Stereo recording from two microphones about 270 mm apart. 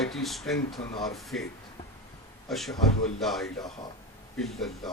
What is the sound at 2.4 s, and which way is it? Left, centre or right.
A man's voice, centre.